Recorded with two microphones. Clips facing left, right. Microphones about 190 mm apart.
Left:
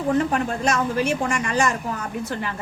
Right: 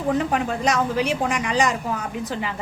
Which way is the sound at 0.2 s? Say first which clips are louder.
Left 1 dB; 15° right (ahead or behind).